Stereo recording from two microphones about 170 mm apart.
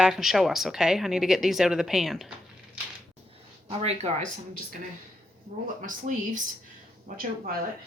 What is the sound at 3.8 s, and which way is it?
Speech, 40° right (ahead or behind).